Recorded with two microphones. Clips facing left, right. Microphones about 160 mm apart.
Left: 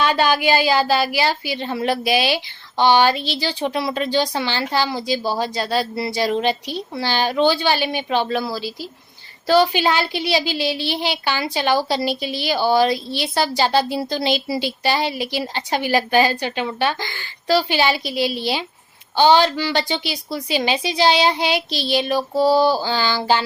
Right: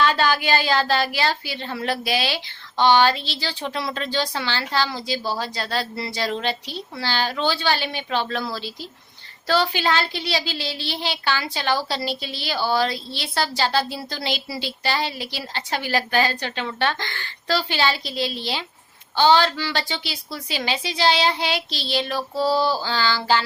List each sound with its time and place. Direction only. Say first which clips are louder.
0.0 s a woman's voice: left 3 dB; 15° left (ahead or behind)